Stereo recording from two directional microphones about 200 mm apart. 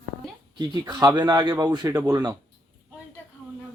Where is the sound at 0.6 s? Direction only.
20° right (ahead or behind).